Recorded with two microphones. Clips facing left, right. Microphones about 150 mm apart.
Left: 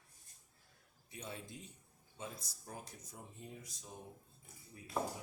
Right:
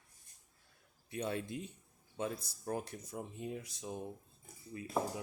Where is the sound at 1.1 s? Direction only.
70° right (ahead or behind).